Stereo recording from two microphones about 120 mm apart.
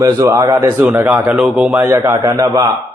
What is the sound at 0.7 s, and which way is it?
Speech, 15° right (ahead or behind).